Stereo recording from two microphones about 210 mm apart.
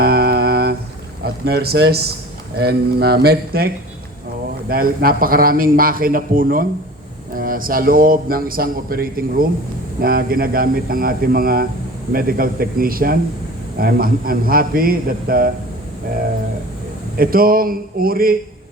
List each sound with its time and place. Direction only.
0.0 s a sound: 45° right (ahead or behind)
1.2 s a man's voice: 50° right (ahead or behind)
4.7 s a man's voice: 45° right (ahead or behind)
17.2 s a man's voice: 45° right (ahead or behind)